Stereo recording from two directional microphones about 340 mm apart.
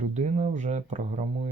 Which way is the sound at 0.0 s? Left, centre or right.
Centre.